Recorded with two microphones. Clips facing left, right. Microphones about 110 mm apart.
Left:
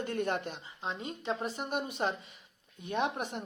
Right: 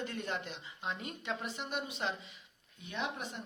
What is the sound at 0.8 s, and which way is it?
Speech, 30° left (ahead or behind).